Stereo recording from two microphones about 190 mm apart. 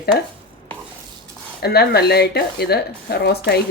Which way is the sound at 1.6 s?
55° left (ahead or behind).